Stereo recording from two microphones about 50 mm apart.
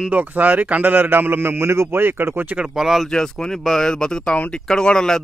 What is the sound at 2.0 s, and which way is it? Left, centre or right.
Speech, right.